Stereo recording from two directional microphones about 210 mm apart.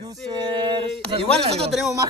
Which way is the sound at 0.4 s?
20° right (ahead or behind).